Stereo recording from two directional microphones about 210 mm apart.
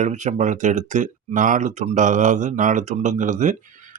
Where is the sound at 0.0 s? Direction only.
35° right (ahead or behind).